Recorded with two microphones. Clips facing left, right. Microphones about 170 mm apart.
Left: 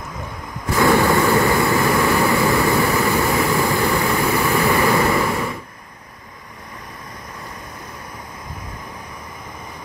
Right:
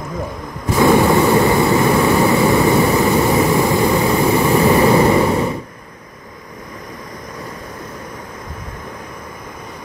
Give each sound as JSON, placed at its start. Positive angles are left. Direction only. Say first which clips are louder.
{"t": 0.7, "sound": "vehicle", "louder": "right 3 dB", "side_deg": -20}